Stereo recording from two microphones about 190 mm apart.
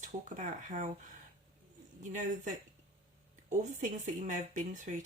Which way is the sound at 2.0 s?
40° right (ahead or behind).